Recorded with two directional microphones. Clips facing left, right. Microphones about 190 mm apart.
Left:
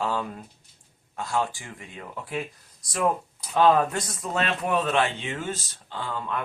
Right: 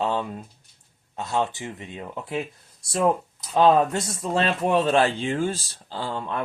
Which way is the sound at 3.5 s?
25° right (ahead or behind).